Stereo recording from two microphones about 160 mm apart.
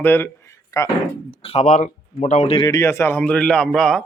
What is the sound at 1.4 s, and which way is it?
Speech, 45° left (ahead or behind).